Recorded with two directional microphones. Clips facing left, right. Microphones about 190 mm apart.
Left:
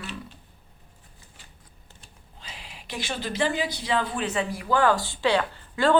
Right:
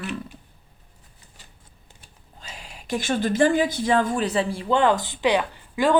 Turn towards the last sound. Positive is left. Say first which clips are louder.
# right 1 dB
turn(degrees=-15)  # may be behind; listen again after turning